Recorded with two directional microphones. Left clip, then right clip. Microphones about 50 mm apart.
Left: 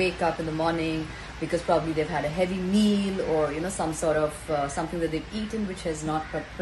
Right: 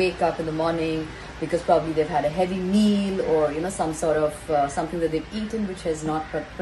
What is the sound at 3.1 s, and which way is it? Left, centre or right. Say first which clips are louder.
Speech: right 6 dB; left.